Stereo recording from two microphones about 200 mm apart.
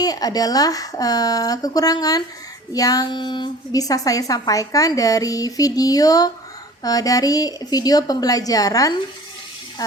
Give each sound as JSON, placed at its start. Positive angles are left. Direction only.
{"t": 0.0, "sound": "a woman's voice", "side_deg": 20}